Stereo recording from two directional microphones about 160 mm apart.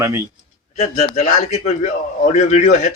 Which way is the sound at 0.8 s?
45° left (ahead or behind).